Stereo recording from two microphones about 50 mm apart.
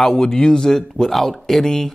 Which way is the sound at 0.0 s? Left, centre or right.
Centre.